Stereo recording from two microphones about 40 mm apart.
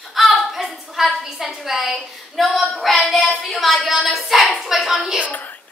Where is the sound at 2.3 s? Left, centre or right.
Centre.